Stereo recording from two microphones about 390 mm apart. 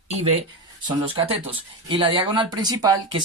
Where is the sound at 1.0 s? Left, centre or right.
Centre.